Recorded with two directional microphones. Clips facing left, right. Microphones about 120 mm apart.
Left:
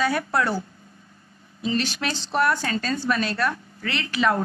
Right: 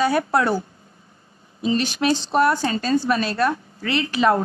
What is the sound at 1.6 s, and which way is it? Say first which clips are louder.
A woman's voice: right 5 dB; 20° right (ahead or behind).